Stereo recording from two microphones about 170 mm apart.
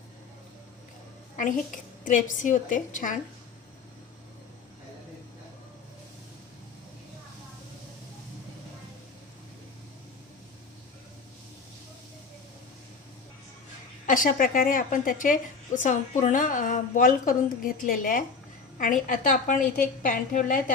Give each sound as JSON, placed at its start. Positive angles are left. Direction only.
{"t": 1.4, "sound": "a woman's voice", "side_deg": 50}
{"t": 14.1, "sound": "a woman's voice", "side_deg": 50}